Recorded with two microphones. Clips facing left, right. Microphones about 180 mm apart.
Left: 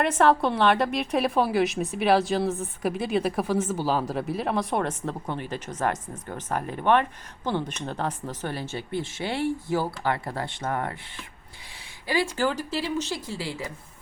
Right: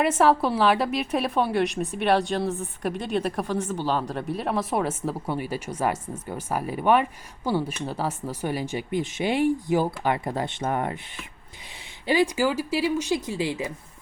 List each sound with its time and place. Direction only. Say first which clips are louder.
0.0 s a woman's voice: right 1 dB; 5° right (ahead or behind)
12.0 s speech: right 3 dB; 20° right (ahead or behind)